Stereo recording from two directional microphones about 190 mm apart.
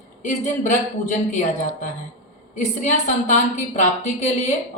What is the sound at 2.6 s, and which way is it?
A woman's voice, 40° left (ahead or behind).